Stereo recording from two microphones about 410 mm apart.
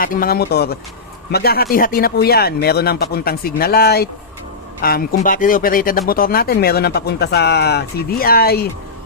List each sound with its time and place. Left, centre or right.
0.0 s speech: left